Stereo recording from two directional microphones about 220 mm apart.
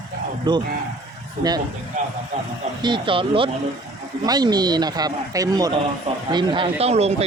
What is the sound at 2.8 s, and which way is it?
Speech, 20° right (ahead or behind).